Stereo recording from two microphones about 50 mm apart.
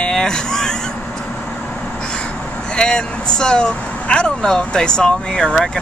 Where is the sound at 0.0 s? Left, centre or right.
Centre.